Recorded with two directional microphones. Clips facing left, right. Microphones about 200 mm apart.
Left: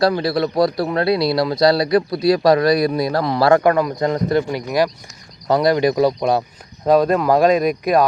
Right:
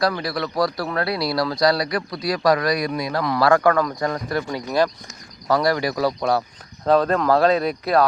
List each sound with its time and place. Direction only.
0.2 s a man's voice: 25° left (ahead or behind)